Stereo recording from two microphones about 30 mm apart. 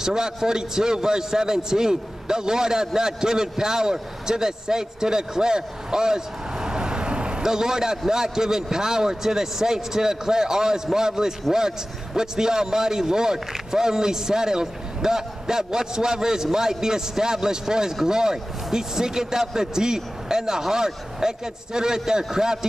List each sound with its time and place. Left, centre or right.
0.0 s a man's voice: centre
7.4 s a man's voice: centre